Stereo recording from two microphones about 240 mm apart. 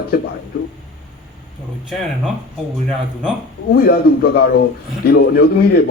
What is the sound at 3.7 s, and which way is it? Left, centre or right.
A man's voice, left.